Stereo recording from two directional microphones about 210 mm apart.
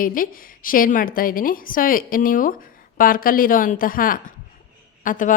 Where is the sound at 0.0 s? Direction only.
40° left (ahead or behind).